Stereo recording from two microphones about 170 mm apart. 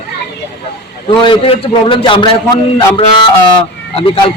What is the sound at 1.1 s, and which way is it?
A man's voice, 30° left (ahead or behind).